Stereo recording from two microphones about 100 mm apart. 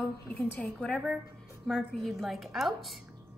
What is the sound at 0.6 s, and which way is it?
A woman's voice, 10° left (ahead or behind).